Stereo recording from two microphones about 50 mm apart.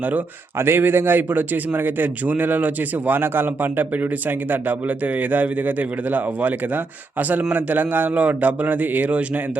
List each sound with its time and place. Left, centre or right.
0.6 s a man's voice: right